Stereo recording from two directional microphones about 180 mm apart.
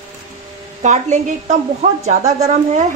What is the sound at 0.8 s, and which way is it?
A woman's voice, 40° right (ahead or behind).